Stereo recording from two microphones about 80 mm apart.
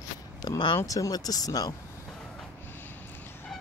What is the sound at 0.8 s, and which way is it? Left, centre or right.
Speech, left.